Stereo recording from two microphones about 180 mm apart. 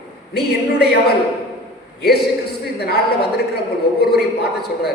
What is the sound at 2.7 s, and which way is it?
A man's voice, 60° left (ahead or behind).